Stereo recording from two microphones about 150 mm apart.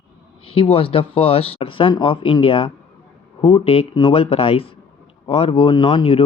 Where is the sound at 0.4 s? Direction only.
35° left (ahead or behind).